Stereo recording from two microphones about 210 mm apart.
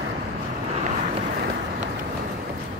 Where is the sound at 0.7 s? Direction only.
35° right (ahead or behind).